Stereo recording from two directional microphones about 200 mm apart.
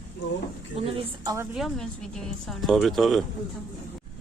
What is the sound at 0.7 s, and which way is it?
Speech, 30° right (ahead or behind).